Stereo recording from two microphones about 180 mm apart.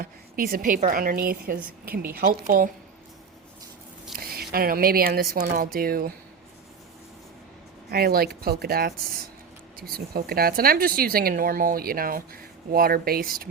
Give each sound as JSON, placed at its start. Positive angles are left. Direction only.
{"t": 0.0, "sound": "a woman's voice", "side_deg": -55}
{"t": 4.2, "sound": "speech", "side_deg": -55}
{"t": 7.9, "sound": "speech", "side_deg": -60}